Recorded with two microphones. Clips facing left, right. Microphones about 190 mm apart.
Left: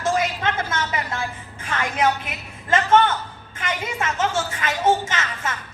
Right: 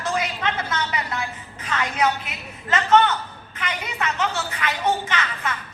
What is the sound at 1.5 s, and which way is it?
Music, 50° left (ahead or behind).